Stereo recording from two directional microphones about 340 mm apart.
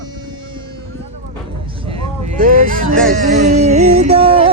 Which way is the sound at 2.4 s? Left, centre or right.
Right.